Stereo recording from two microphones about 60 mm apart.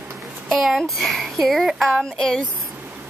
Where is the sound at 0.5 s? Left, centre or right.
Centre.